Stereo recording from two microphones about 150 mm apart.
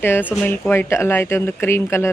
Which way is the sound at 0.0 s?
15° left (ahead or behind).